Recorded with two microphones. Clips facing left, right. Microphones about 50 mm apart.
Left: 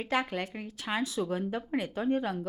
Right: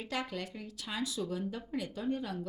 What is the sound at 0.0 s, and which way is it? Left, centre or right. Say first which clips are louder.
Speech: left 7 dB; left.